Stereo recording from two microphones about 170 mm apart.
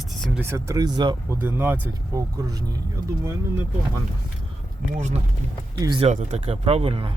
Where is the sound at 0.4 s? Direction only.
15° right (ahead or behind).